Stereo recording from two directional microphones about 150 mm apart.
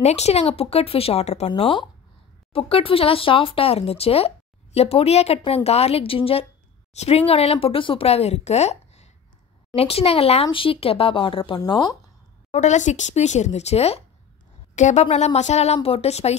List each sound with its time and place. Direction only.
0.0 s speech: 45° left (ahead or behind)
1.5 s speech: 35° left (ahead or behind)
12.4 s speech: 50° left (ahead or behind)